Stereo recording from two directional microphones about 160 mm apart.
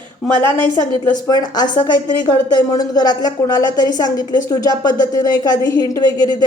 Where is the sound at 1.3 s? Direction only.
25° left (ahead or behind).